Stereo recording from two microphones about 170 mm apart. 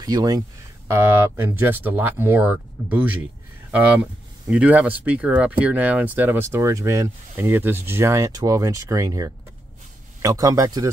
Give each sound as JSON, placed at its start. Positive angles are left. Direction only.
{"t": 0.0, "sound": "speech", "side_deg": -20}
{"t": 4.5, "sound": "speech", "side_deg": -5}